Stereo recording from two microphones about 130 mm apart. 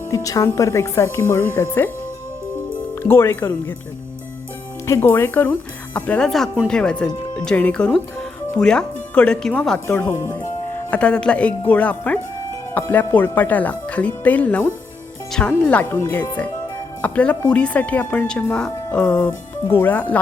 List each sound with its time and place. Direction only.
0.1 s speech: 25° left (ahead or behind)
2.9 s speech: 20° left (ahead or behind)
4.9 s speech: 20° left (ahead or behind)
10.9 s speech: 10° left (ahead or behind)
19.3 s speech: 20° left (ahead or behind)